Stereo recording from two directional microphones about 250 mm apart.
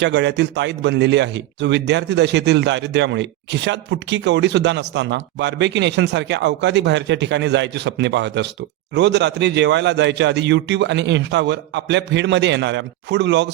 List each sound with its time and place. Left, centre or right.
0.0 s a man's voice: right